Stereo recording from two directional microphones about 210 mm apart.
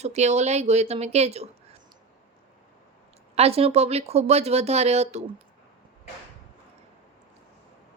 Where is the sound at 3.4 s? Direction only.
30° right (ahead or behind).